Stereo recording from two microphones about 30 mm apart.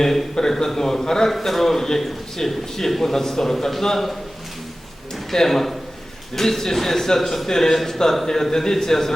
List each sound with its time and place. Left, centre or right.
0.0 s a man's voice: centre
1.3 s a man's voice: centre
5.3 s a man's voice: centre